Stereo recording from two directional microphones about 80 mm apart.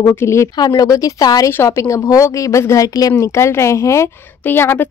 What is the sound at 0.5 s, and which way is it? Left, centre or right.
Speech, left.